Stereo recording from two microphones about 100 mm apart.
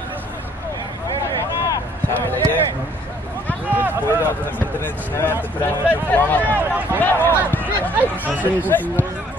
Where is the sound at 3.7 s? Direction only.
20° right (ahead or behind).